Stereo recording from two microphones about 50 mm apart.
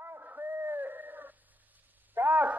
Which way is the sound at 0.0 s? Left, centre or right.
Right.